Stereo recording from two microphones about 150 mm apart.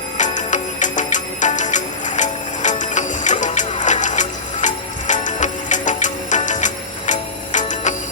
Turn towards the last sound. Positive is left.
turn(degrees=55)  # may be behind; listen again after turning